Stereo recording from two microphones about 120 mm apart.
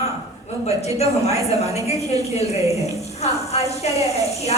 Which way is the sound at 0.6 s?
65° left (ahead or behind).